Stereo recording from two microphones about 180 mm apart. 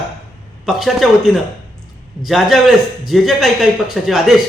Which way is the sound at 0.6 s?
Centre (ahead or behind).